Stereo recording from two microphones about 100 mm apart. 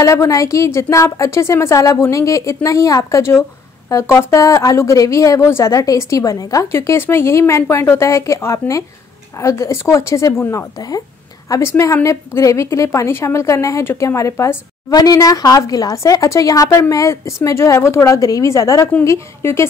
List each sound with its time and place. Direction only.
0.0 s a woman's voice: 30° left (ahead or behind)
14.9 s a woman's voice: 40° left (ahead or behind)